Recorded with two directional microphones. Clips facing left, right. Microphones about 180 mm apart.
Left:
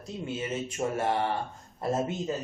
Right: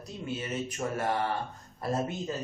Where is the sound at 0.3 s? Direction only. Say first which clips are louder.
Left 2 dB; 25° left (ahead or behind).